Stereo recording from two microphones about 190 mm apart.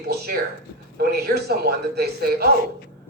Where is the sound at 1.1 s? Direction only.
55° right (ahead or behind).